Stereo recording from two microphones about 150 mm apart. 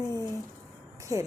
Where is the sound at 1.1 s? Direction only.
25° right (ahead or behind).